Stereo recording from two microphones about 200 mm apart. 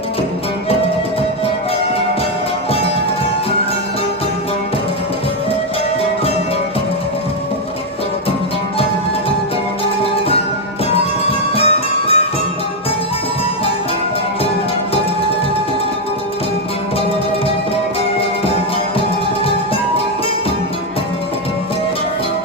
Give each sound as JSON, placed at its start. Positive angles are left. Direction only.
{"t": 11.5, "sound": "music", "side_deg": 30}